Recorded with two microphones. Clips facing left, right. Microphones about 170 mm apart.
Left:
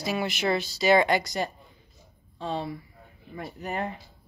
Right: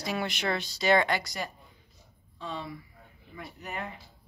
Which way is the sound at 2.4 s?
35° left (ahead or behind).